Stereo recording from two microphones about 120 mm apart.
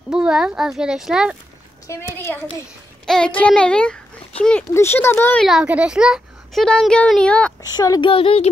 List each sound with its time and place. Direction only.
0.1 s a child's voice: 5° right (ahead or behind)
1.9 s speech: 20° left (ahead or behind)
3.3 s a child's voice: 10° left (ahead or behind)
5.4 s a child's voice: 5° right (ahead or behind)
7.6 s speech: 30° left (ahead or behind)
8.0 s speech: 50° left (ahead or behind)